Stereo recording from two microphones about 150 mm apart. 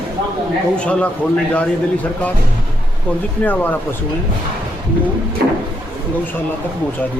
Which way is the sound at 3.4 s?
10° left (ahead or behind).